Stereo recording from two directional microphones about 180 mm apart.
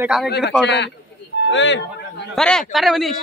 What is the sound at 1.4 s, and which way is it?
Speech, 90° left.